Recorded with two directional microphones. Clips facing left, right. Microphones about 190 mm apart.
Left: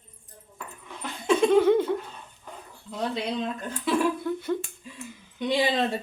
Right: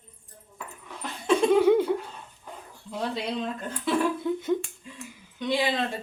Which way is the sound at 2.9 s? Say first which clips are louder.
Left 1 dB; 5° right (ahead or behind).